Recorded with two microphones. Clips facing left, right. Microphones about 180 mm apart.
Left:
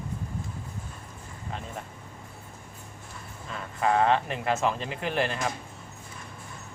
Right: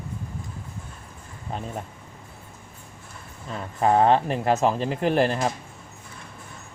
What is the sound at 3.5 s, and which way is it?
Speech, 35° right (ahead or behind).